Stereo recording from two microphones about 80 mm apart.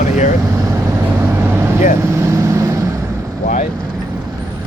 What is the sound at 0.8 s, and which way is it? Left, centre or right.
Vehicle, right.